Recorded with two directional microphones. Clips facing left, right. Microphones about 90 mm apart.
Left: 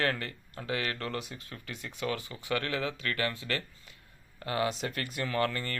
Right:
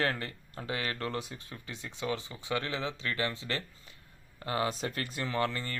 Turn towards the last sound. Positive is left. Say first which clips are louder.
# left 1 dB
turn(degrees=-20)  # may be behind; listen again after turning